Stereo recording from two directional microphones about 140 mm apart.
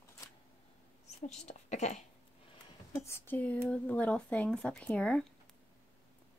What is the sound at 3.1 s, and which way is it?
Speech, 10° left (ahead or behind).